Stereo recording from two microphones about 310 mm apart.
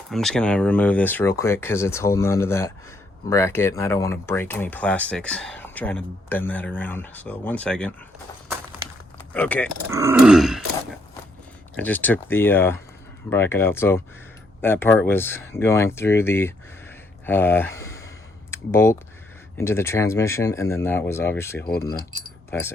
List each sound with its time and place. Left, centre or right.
0.1 s speech: centre
9.3 s speech: centre
9.9 s speech: centre
11.8 s speech: centre
21.6 s speech: left